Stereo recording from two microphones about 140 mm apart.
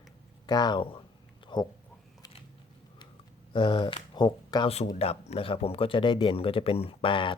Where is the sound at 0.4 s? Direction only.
30° left (ahead or behind).